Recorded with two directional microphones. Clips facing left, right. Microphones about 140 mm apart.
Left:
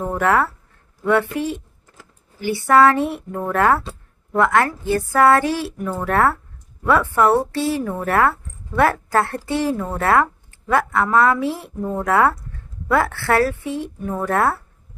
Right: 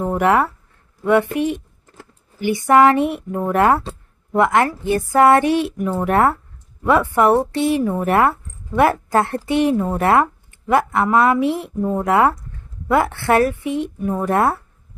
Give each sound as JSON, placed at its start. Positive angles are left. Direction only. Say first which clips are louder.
{"t": 0.0, "sound": "a woman's voice", "louder": "right 2 dB", "side_deg": -15}